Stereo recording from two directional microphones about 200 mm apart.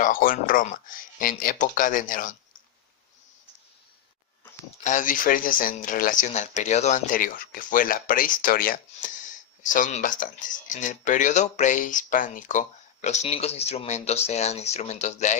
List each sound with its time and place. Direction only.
0.0 s speech: 45° left (ahead or behind)
4.8 s speech: 40° left (ahead or behind)